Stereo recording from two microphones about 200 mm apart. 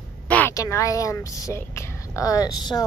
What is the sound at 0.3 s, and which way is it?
Speech, 10° left (ahead or behind).